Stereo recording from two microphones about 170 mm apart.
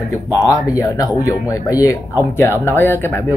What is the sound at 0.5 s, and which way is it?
Speech, 20° left (ahead or behind).